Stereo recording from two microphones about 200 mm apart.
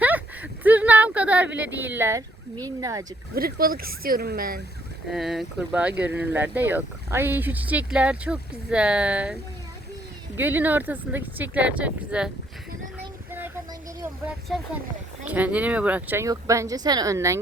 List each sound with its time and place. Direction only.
0.0 s a sound: 10° right (ahead or behind)
2.6 s speech: 15° right (ahead or behind)
3.3 s speech: 45° right (ahead or behind)
5.1 s speech: centre (ahead or behind)
14.0 s speech: 5° right (ahead or behind)